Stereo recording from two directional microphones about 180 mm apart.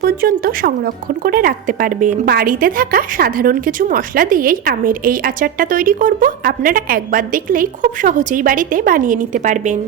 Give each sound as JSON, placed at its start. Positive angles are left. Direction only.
{"t": 0.0, "sound": "a woman's voice", "side_deg": -55}